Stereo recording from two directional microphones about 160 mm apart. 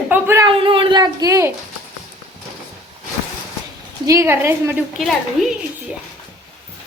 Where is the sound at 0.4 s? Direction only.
35° right (ahead or behind).